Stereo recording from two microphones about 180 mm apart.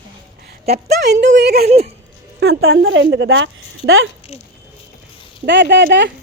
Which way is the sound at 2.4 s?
90° right.